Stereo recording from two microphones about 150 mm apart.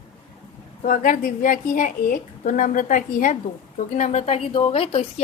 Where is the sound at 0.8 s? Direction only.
60° left (ahead or behind).